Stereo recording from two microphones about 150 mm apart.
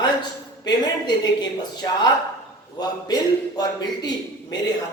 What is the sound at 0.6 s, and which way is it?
A man's voice, 30° left (ahead or behind).